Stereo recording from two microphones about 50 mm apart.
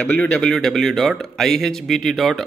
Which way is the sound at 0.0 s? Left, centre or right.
Left.